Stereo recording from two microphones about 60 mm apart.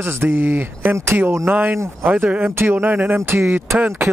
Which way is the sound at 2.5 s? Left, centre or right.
Right.